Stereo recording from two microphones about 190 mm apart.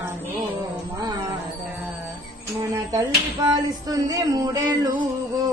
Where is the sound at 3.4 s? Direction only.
20° right (ahead or behind).